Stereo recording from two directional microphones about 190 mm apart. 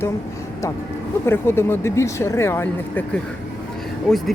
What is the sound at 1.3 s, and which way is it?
Speech, 10° left (ahead or behind).